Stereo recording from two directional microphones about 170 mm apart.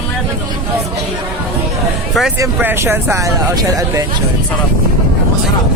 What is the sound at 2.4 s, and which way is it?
Speech, 15° right (ahead or behind).